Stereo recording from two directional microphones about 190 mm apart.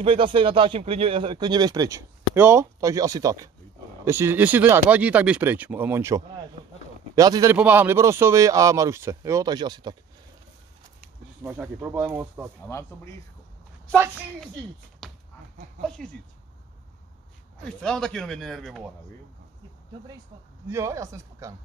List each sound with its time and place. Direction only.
0.0 s speech: 30° right (ahead or behind)
7.5 s speech: 10° right (ahead or behind)
11.4 s speech: 10° right (ahead or behind)
12.6 s speech: 15° left (ahead or behind)
15.0 s a sound: centre (ahead or behind)
17.8 s speech: 5° left (ahead or behind)
20.6 s speech: 15° right (ahead or behind)